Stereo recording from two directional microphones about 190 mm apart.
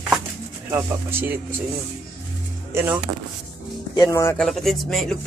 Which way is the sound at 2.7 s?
15° right (ahead or behind).